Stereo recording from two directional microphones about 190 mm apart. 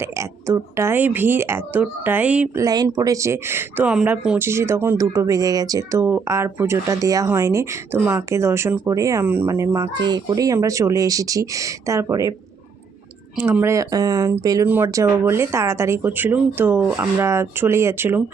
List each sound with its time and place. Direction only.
0.0 s speech: 15° right (ahead or behind)
2.6 s speech: 20° right (ahead or behind)
13.3 s speech: 10° right (ahead or behind)